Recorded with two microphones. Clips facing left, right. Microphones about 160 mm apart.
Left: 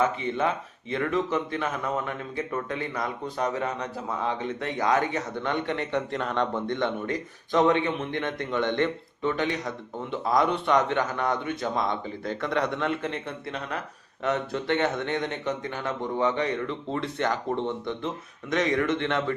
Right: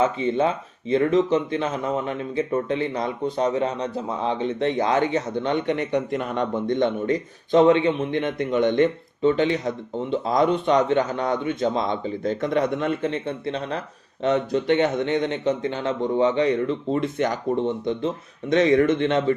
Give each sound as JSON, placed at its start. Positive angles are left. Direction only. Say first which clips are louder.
{"t": 0.0, "sound": "speech", "louder": "right 5 dB", "side_deg": -20}